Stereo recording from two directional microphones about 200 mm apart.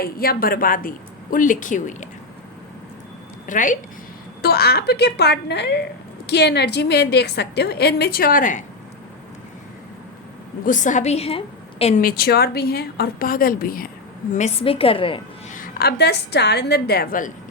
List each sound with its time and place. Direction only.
0.0 s a woman's voice: 50° left (ahead or behind)
3.4 s a woman's voice: 40° left (ahead or behind)
4.4 s a woman's voice: 50° left (ahead or behind)
10.7 s a woman's voice: 40° left (ahead or behind)
14.3 s a woman's voice: 30° left (ahead or behind)
15.5 s a woman's voice: 45° left (ahead or behind)